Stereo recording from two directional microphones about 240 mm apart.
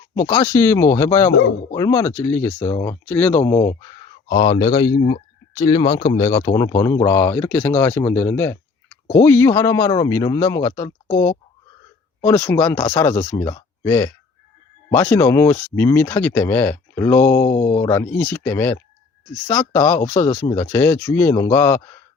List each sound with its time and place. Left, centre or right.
0.1 s speech: centre
3.4 s speech: centre
12.2 s speech: centre
17.6 s speech: left
17.9 s speech: centre